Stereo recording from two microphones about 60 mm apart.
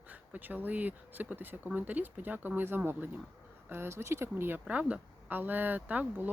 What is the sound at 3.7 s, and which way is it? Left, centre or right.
Speech, right.